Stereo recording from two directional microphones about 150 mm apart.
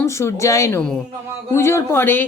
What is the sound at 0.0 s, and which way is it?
A man's voice, 20° left (ahead or behind).